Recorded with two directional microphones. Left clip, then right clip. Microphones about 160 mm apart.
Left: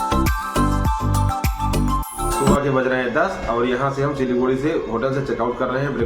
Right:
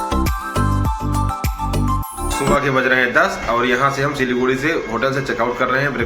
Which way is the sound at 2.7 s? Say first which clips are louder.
Right 4 dB; 20° left (ahead or behind).